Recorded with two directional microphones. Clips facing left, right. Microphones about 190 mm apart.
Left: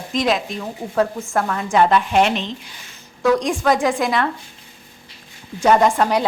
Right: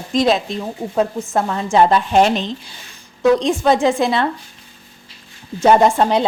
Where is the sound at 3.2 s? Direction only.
25° right (ahead or behind).